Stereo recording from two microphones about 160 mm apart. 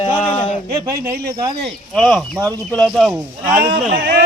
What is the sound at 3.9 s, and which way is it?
Speech, 90° right.